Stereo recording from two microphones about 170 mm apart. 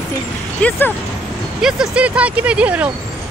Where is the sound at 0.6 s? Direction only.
10° left (ahead or behind).